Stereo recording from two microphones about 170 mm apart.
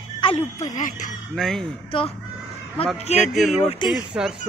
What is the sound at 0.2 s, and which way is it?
Speech, 35° left (ahead or behind).